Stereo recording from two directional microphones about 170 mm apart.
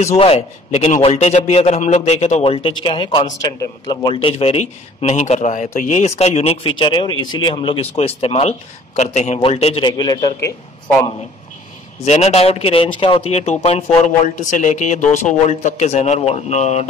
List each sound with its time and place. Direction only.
0.0 s a man's voice: 35° left (ahead or behind); by 10.5 s 20° left (ahead or behind)
12.0 s a man's voice: 40° left (ahead or behind)